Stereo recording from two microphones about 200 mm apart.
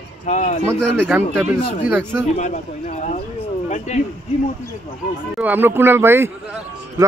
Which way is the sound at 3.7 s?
35° left (ahead or behind).